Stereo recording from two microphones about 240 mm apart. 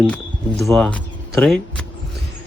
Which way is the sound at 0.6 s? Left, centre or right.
Centre.